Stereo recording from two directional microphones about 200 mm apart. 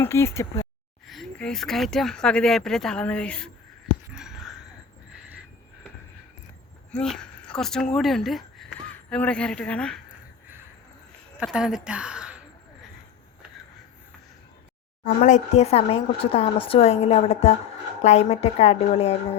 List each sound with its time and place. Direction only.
0.0 s speech: 10° left (ahead or behind)
1.0 s speech: centre (ahead or behind)
4.1 s a sound: 5° right (ahead or behind)
6.9 s speech: 5° left (ahead or behind)
11.3 s speech: 5° right (ahead or behind)
15.0 s speech: 35° left (ahead or behind)